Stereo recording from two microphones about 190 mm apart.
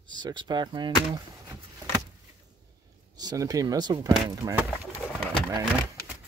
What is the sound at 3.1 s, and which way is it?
Speech, 20° right (ahead or behind).